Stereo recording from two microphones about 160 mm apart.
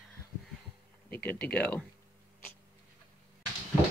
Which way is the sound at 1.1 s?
10° left (ahead or behind).